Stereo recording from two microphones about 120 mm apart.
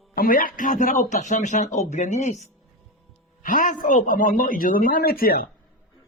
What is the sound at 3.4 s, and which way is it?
Speech, 90° left.